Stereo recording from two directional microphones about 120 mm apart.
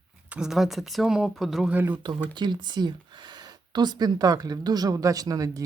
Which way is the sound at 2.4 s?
40° right (ahead or behind).